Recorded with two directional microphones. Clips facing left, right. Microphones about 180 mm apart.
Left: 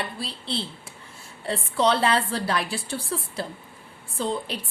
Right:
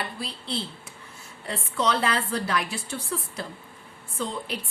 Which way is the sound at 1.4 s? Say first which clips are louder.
Left 4 dB; 30° left (ahead or behind).